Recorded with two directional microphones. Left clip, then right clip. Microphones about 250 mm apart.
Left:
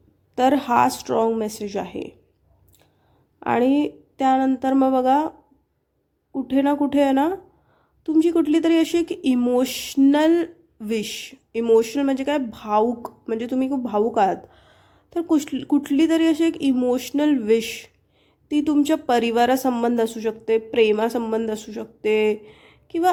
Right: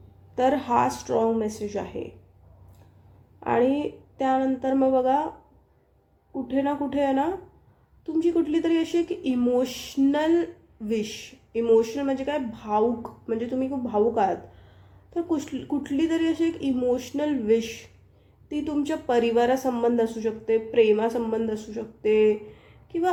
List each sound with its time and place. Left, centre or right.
0.3 s speech: left
3.4 s speech: left
6.3 s speech: left